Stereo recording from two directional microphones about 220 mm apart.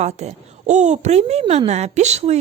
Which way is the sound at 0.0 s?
30° right (ahead or behind).